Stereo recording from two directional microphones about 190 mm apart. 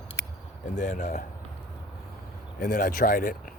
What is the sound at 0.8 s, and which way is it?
Speech, 40° left (ahead or behind).